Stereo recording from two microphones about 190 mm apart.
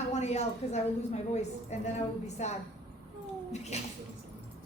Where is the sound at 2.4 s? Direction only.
35° left (ahead or behind).